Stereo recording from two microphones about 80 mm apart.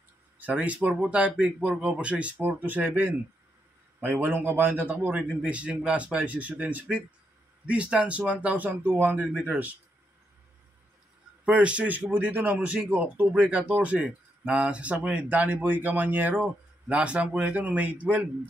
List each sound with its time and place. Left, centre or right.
0.4 s speech: centre
11.4 s speech: centre